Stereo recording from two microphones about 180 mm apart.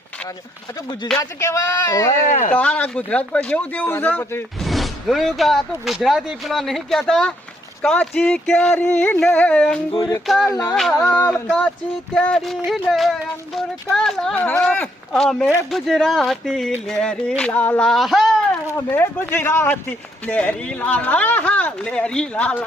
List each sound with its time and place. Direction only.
1.2 s speech: 20° left (ahead or behind)
2.2 s speech: 45° left (ahead or behind)
2.5 s speech: 10° left (ahead or behind)
4.6 s speech: centre (ahead or behind)
9.9 s speech: 25° left (ahead or behind)
10.2 s speech: centre (ahead or behind)
10.5 s speech: 20° left (ahead or behind); by 18.3 s centre (ahead or behind)
18.9 s speech: 10° left (ahead or behind)